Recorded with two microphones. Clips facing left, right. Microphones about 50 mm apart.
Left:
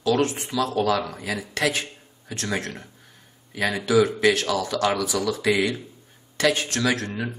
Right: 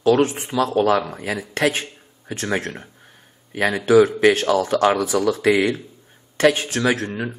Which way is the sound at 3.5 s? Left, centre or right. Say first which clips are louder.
Right 5 dB; right.